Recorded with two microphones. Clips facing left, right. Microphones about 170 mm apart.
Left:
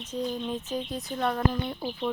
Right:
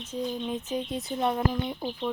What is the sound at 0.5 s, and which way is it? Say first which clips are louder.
Speech: right 1 dB; 20° right (ahead or behind).